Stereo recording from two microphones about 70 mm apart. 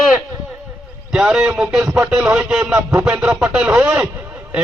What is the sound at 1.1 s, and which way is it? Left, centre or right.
Speech, centre.